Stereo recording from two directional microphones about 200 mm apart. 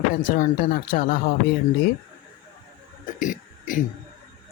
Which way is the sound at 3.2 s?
40° left (ahead or behind).